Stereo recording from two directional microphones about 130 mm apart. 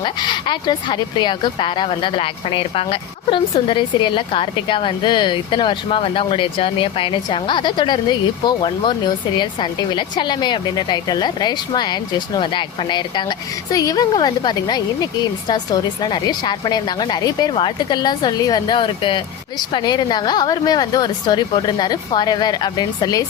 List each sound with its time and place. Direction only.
0.0 s speech: 35° left (ahead or behind)